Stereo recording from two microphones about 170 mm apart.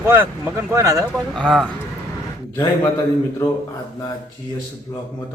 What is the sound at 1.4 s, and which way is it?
Speech, 5° left (ahead or behind).